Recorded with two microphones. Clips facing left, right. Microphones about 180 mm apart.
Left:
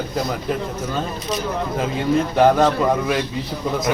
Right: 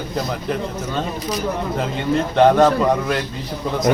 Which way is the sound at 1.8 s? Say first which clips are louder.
Left 2 dB; 5° left (ahead or behind).